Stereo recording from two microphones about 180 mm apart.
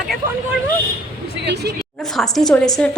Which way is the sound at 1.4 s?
70° right (ahead or behind).